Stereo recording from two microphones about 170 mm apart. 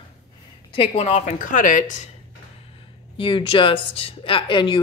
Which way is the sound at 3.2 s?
30° left (ahead or behind).